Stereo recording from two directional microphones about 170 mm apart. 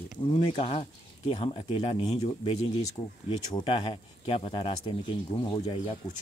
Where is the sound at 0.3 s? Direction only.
35° left (ahead or behind).